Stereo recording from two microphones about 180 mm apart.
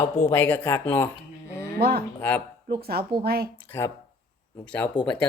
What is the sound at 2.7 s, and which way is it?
Speech, 60° right (ahead or behind).